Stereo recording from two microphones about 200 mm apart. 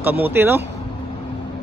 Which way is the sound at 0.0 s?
10° right (ahead or behind).